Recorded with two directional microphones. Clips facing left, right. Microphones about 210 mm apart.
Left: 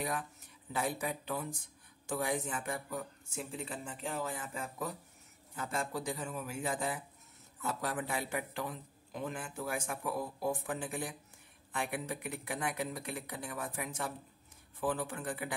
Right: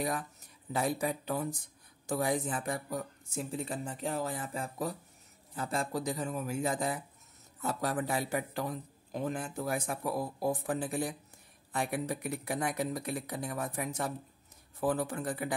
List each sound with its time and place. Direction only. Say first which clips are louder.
0.7 s a man's voice: right 4 dB; 40° right (ahead or behind)